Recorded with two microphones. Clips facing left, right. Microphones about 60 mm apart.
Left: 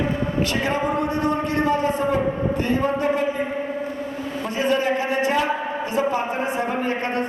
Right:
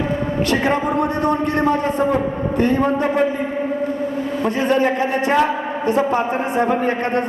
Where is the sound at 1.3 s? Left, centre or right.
Right.